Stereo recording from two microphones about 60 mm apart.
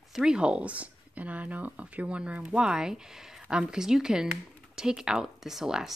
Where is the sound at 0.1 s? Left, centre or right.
Centre.